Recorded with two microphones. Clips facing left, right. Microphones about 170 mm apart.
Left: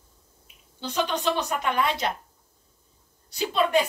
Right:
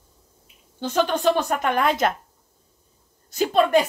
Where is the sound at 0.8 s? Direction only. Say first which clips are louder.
Right 6 dB; 50° right (ahead or behind).